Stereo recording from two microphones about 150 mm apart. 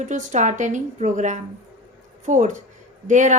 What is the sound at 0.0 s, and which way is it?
A woman's voice, 55° right (ahead or behind).